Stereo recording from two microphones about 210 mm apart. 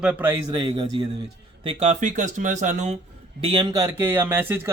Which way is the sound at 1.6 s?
35° right (ahead or behind).